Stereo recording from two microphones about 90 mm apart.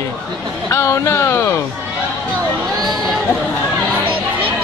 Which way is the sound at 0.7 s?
30° left (ahead or behind).